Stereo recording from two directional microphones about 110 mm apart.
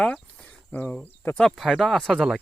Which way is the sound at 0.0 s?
10° left (ahead or behind).